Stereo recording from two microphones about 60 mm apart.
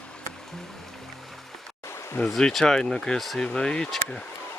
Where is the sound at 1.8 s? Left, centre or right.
Left.